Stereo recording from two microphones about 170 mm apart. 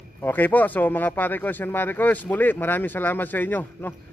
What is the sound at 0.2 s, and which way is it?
Speech, 10° left (ahead or behind).